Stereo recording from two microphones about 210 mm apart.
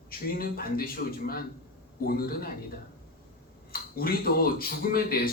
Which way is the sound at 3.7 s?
45° left (ahead or behind).